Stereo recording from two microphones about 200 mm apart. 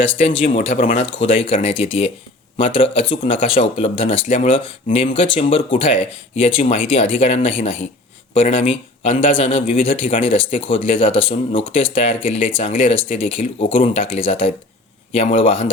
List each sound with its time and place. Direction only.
0.7 s speech: 40° left (ahead or behind)
1.2 s speech: 25° left (ahead or behind)